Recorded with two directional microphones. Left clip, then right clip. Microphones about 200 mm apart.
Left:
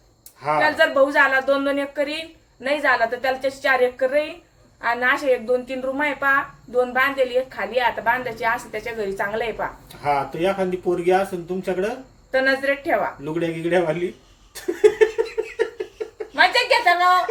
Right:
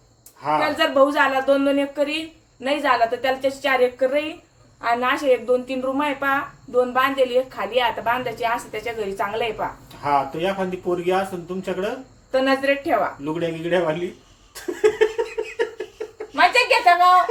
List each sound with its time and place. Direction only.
0.8 s a woman's voice: 10° right (ahead or behind)
10.0 s speech: 10° left (ahead or behind)
12.3 s a woman's voice: 5° right (ahead or behind)
13.4 s speech: 10° left (ahead or behind)
14.8 s a sound: 10° left (ahead or behind)
16.3 s a sound: 10° right (ahead or behind)